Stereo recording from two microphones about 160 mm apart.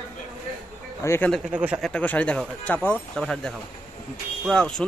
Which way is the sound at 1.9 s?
10° left (ahead or behind).